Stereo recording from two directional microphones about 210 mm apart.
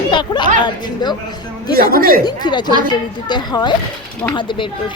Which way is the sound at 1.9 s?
45° right (ahead or behind).